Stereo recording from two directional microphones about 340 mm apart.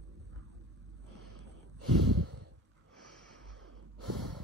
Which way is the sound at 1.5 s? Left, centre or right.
Right.